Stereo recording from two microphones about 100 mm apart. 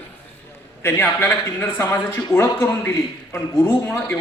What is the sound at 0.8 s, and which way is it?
A man's voice, 25° left (ahead or behind).